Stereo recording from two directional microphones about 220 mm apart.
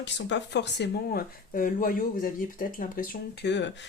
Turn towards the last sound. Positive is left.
turn(degrees=50)  # may be behind; listen again after turning